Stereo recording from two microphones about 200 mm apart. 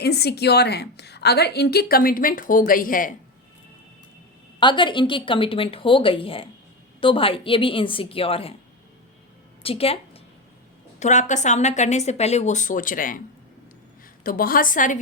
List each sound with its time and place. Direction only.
0.0 s a woman's voice: 55° left (ahead or behind)
4.6 s a woman's voice: 25° left (ahead or behind)
9.6 s a woman's voice: 30° left (ahead or behind)
11.0 s a woman's voice: 35° left (ahead or behind)
14.3 s a woman's voice: 45° left (ahead or behind)